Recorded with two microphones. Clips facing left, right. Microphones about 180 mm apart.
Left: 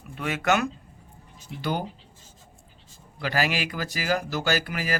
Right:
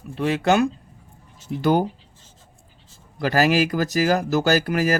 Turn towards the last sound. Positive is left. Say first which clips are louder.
# right 8 dB
turn(degrees=-45)  # may be behind; listen again after turning